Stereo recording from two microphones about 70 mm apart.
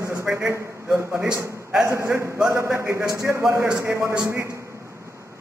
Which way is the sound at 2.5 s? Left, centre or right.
Right.